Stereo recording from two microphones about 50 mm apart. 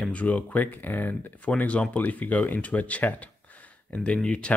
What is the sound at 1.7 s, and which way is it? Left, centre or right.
Speech, left.